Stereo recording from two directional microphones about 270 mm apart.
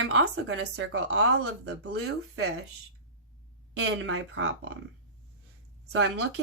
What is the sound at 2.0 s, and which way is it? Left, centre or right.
Speech, right.